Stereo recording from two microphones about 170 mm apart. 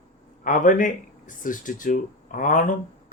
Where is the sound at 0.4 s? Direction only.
50° left (ahead or behind).